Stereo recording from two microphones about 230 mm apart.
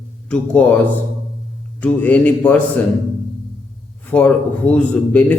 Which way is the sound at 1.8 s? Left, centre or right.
Centre.